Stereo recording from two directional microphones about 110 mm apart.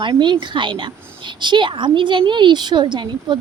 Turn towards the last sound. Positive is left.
turn(degrees=-45)  # may be behind; listen again after turning